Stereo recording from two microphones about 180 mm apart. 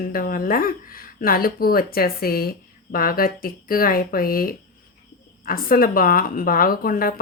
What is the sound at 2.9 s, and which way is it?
A woman's voice, 55° left (ahead or behind).